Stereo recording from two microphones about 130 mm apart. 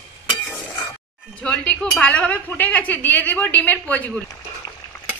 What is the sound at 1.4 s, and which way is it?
Speech, 10° left (ahead or behind).